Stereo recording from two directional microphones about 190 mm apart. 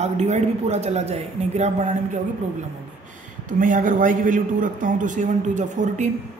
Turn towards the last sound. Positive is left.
turn(degrees=-40)  # may be behind; listen again after turning